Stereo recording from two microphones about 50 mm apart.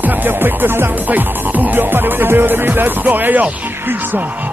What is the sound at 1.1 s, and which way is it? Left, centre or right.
Speech, right.